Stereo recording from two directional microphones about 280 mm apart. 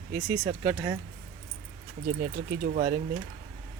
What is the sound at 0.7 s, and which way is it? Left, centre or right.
Speech, centre.